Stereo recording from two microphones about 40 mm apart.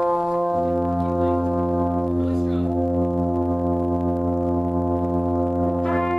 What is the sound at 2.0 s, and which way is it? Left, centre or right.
Foghorn, centre.